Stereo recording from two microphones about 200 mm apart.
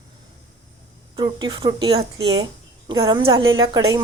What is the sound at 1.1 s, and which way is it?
A woman's voice, 20° right (ahead or behind).